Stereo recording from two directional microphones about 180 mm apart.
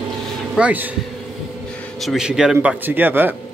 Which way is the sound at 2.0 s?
Centre (ahead or behind).